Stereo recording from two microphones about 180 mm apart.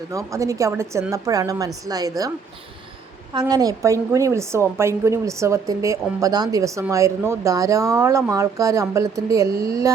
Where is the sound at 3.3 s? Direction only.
20° right (ahead or behind).